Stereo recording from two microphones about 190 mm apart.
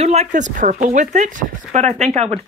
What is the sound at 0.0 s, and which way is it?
Speech, 35° right (ahead or behind).